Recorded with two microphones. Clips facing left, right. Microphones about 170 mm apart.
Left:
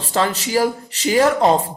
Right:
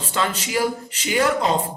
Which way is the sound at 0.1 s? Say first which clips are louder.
Left 5 dB; 35° left (ahead or behind).